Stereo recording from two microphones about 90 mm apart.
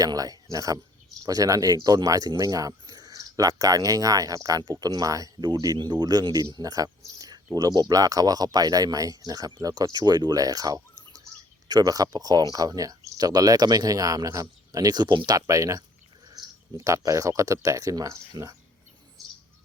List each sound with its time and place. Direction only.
0.0 s speech: 40° right (ahead or behind)
15.4 s speech: 35° right (ahead or behind)
19.2 s bird: centre (ahead or behind)